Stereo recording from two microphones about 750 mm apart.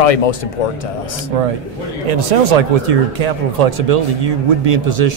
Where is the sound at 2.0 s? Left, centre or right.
Right.